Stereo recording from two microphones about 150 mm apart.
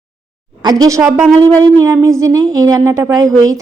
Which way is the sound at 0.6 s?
25° right (ahead or behind).